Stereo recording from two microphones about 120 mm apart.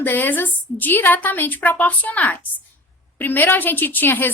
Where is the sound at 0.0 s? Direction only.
15° left (ahead or behind).